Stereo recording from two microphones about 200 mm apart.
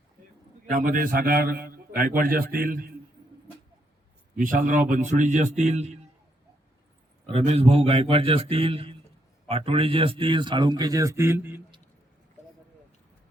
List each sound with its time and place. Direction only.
0.7 s a man's voice: 40° right (ahead or behind)
4.5 s a man's voice: 40° right (ahead or behind)
7.3 s a man's voice: 30° right (ahead or behind); by 11.6 s 10° right (ahead or behind)